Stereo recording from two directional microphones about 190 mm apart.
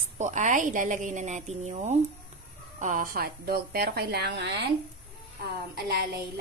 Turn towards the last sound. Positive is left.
turn(degrees=-55)  # may be behind; listen again after turning